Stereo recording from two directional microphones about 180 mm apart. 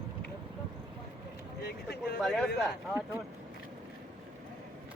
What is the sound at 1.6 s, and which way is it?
Speech, 60° left (ahead or behind).